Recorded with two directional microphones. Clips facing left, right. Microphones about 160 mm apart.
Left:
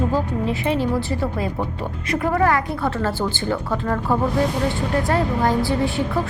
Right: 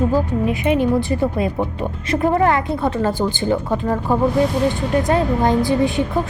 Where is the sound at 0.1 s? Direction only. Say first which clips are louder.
Right 3 dB; 15° right (ahead or behind).